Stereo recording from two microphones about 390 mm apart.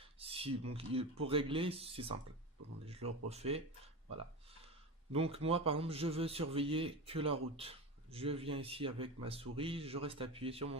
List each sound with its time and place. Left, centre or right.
0.0 s a man's voice: centre
5.1 s a man's voice: centre